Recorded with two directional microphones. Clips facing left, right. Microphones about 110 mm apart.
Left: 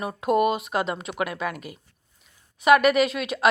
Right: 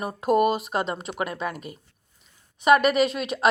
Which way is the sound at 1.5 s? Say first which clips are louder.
Even; 35° right (ahead or behind).